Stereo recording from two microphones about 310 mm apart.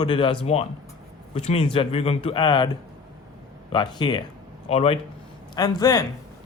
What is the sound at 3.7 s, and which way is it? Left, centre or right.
A man's voice, centre.